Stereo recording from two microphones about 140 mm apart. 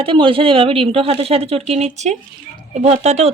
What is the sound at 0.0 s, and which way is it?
Speech, 40° right (ahead or behind).